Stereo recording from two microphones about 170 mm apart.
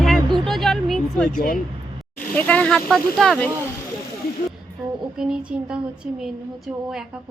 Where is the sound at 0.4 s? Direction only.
Centre (ahead or behind).